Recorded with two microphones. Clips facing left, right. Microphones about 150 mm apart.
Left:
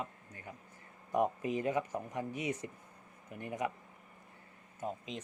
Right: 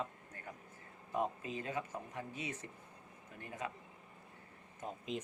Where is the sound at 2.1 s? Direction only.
15° left (ahead or behind).